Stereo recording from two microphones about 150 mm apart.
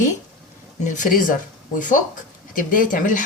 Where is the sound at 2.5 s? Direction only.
65° left (ahead or behind).